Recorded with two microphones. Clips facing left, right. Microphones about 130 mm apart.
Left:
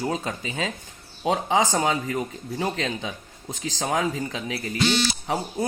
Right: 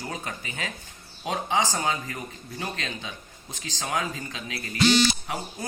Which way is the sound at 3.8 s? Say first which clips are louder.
Left 5 dB; 30° left (ahead or behind).